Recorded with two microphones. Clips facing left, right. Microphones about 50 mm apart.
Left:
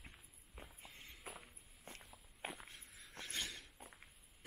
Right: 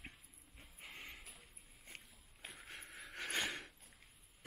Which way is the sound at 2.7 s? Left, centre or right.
Right.